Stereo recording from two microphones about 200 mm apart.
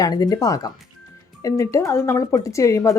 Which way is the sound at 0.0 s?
20° left (ahead or behind).